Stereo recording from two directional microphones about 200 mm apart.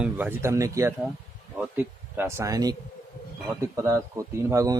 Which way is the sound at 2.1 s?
10° right (ahead or behind).